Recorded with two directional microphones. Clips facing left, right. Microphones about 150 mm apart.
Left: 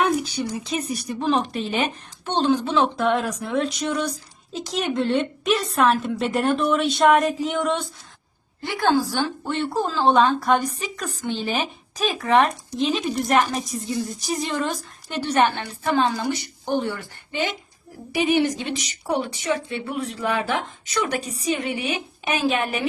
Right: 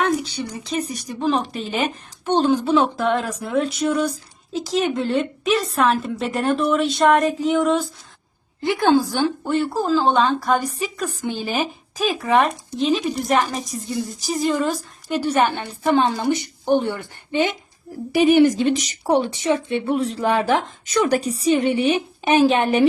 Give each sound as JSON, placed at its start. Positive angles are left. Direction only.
{"t": 0.0, "sound": "a woman's voice", "side_deg": 10}
{"t": 2.2, "sound": "a woman's voice", "side_deg": -10}
{"t": 8.6, "sound": "a woman's voice", "side_deg": -15}
{"t": 9.4, "sound": "a woman's voice", "side_deg": -5}
{"t": 15.8, "sound": "a woman's voice", "side_deg": -15}
{"t": 18.1, "sound": "speech", "side_deg": -45}
{"t": 19.0, "sound": "speech", "side_deg": -30}